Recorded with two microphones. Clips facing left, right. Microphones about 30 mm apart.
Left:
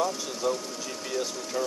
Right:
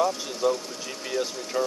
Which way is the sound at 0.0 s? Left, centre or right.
Centre.